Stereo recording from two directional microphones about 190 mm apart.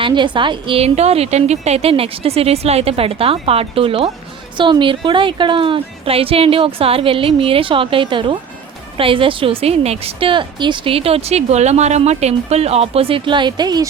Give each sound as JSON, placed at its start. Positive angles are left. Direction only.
{"t": 0.0, "sound": "a woman's voice", "side_deg": -25}